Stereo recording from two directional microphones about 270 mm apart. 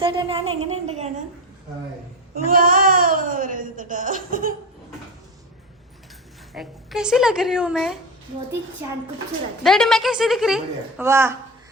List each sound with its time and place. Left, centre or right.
0.0 s speech: centre
2.3 s a sound: right
6.5 s a woman's voice: centre
9.6 s a woman's voice: centre